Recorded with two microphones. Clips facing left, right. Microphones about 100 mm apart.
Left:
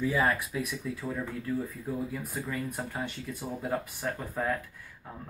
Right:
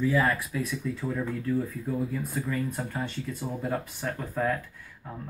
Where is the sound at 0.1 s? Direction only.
20° left (ahead or behind).